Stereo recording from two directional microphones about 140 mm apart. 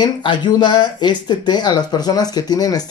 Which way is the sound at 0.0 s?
30° left (ahead or behind).